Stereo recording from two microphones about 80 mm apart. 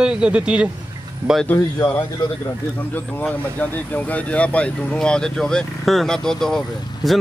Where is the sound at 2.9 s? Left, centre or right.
Left.